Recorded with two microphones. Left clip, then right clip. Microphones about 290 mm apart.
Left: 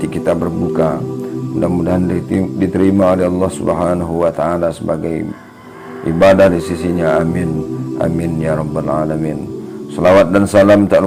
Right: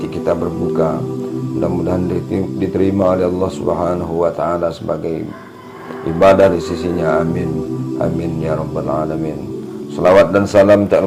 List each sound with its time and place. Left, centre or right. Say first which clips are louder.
1.5 s speech: left 2 dB; left